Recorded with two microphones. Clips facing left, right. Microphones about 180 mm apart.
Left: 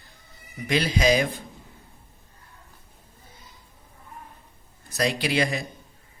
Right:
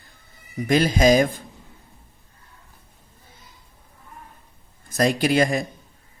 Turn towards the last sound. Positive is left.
turn(degrees=-45)  # may be behind; listen again after turning